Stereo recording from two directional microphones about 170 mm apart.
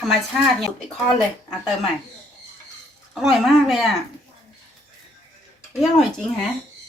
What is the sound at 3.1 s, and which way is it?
Speech, centre (ahead or behind).